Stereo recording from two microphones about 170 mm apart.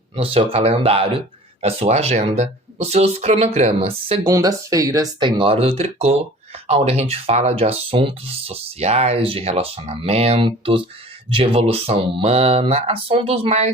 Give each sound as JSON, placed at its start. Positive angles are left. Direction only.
{"t": 0.2, "sound": "speech", "side_deg": -35}
{"t": 4.3, "sound": "speech", "side_deg": -20}